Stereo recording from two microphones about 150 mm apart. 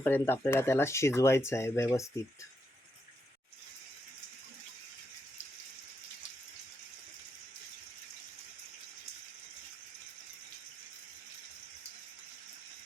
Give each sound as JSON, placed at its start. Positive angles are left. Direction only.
{"t": 0.0, "sound": "speech", "side_deg": 15}